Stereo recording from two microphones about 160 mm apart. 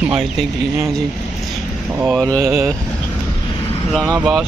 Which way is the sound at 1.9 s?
5° right (ahead or behind).